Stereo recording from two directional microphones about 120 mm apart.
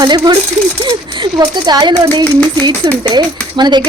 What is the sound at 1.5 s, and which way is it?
Speech, 35° right (ahead or behind).